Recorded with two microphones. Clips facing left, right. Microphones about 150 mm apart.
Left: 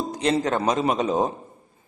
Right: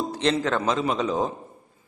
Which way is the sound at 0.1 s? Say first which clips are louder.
Left 2 dB; 10° left (ahead or behind).